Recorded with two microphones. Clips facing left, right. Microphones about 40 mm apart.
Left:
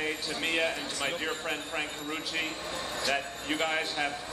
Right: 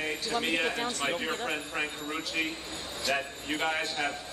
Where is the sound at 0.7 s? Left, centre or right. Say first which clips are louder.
Right 3 dB; right.